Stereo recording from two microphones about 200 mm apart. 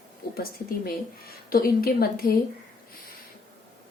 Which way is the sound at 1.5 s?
45° left (ahead or behind).